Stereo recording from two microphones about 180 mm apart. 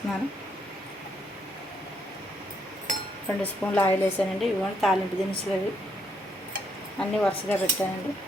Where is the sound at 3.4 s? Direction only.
10° left (ahead or behind).